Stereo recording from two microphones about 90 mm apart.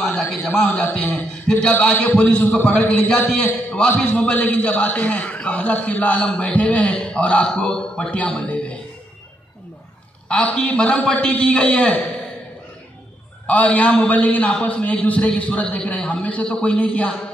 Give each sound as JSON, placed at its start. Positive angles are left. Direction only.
{"t": 0.0, "sound": "a sound", "side_deg": 5}
{"t": 0.6, "sound": "a man's voice", "side_deg": 15}
{"t": 10.2, "sound": "a man's voice", "side_deg": 10}
{"t": 13.5, "sound": "a man's voice", "side_deg": 15}